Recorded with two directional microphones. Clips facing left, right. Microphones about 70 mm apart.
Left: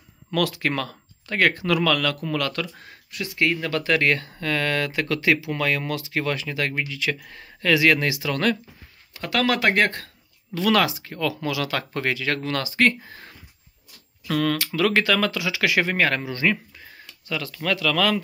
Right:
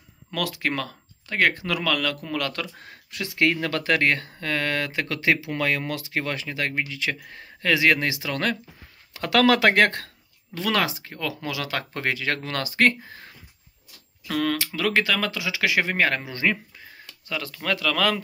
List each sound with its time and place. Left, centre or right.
0.3 s speech: centre
2.2 s speech: right
3.2 s speech: right
3.6 s speech: right
4.0 s speech: right
9.1 s speech: right
10.5 s speech: right
14.3 s speech: centre
17.3 s speech: right